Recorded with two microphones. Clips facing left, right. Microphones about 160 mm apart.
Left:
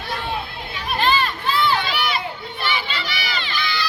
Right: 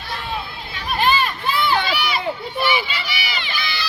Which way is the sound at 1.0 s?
15° right (ahead or behind).